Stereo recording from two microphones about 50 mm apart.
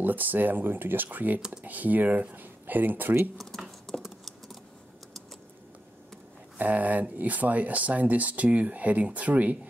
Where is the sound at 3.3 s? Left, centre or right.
Centre.